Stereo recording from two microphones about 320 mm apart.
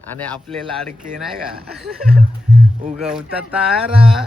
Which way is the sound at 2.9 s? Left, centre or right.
Centre.